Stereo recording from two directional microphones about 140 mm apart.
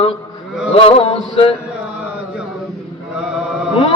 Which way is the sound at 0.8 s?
45° left (ahead or behind).